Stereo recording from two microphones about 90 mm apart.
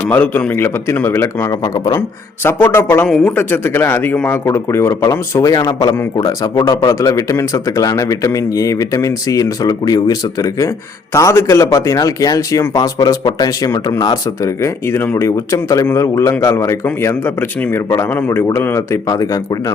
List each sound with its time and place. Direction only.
0.0 s a man's voice: 15° left (ahead or behind)
1.6 s speech: 50° left (ahead or behind)
1.9 s a man's voice: 25° left (ahead or behind)
17.8 s a man's voice: 35° left (ahead or behind)
19.0 s speech: 40° left (ahead or behind)